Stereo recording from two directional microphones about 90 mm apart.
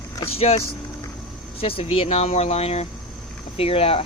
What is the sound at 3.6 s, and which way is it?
Speech, 90° left.